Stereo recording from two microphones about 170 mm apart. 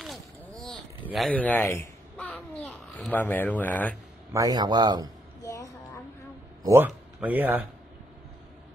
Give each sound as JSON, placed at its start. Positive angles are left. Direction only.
{"t": 0.0, "sound": "boat", "side_deg": 0}
{"t": 1.0, "sound": "a child's voice", "side_deg": 0}
{"t": 4.3, "sound": "a man's voice", "side_deg": -20}
{"t": 5.4, "sound": "a sound", "side_deg": 20}
{"t": 6.6, "sound": "a man's voice", "side_deg": -15}